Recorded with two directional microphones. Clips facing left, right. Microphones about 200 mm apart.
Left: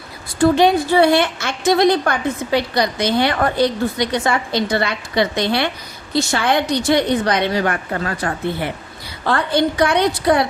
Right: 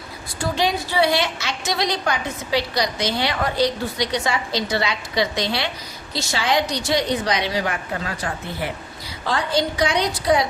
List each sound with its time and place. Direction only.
0.5 s a woman's voice: 55° left (ahead or behind)